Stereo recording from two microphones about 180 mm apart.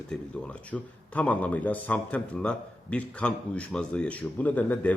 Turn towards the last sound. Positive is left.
turn(degrees=10)  # may be behind; listen again after turning